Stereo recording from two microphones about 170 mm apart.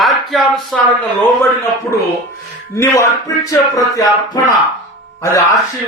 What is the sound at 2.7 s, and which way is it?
Speech, 20° left (ahead or behind).